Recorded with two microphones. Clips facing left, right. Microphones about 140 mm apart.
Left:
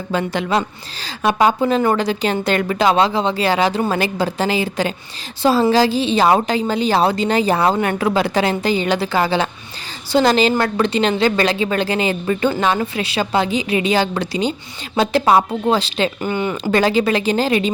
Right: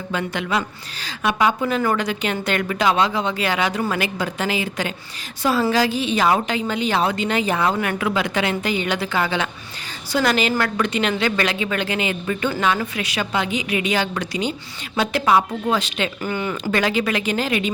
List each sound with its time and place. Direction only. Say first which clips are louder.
0.1 s a woman's voice: left 5 dB; 30° left (ahead or behind)